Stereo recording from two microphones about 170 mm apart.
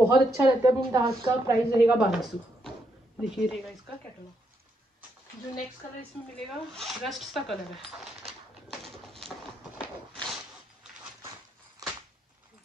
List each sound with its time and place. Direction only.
0.0 s a woman's voice: 15° right (ahead or behind)
1.9 s speech: 5° right (ahead or behind)
6.3 s speech: 5° left (ahead or behind)
9.0 s a sound: centre (ahead or behind)